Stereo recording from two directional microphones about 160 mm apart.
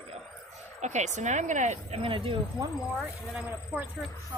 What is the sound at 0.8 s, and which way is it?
Speech, 45° right (ahead or behind).